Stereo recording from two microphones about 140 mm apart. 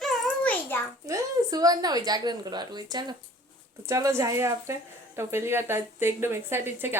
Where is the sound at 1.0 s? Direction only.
25° right (ahead or behind).